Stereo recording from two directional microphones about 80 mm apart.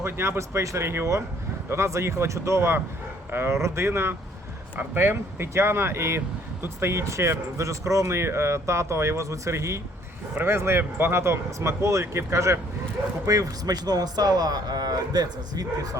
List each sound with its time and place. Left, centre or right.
0.0 s speech: right